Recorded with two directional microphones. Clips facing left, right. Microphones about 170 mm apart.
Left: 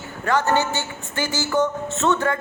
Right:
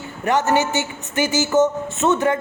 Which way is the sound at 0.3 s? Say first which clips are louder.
Right 2 dB; 20° right (ahead or behind).